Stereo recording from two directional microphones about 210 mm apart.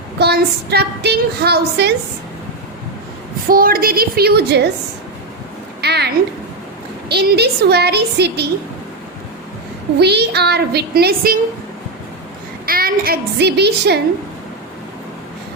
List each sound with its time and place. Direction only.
0.2 s a woman's voice: 50° right (ahead or behind)
3.5 s a woman's voice: 45° right (ahead or behind)
5.8 s a sound: 50° right (ahead or behind)
7.1 s a woman's voice: 50° right (ahead or behind)
10.0 s a woman's voice: 50° right (ahead or behind)
12.6 s a woman's voice: 45° right (ahead or behind)